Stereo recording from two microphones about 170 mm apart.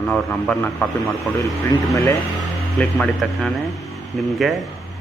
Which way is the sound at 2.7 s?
5° left (ahead or behind).